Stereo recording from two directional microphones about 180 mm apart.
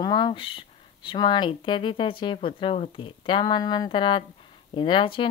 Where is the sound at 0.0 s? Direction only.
25° left (ahead or behind).